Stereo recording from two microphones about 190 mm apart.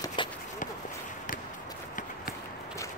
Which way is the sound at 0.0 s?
25° left (ahead or behind).